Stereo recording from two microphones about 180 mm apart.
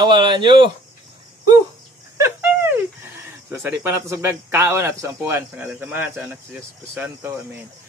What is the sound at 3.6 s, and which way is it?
Speech, 10° right (ahead or behind).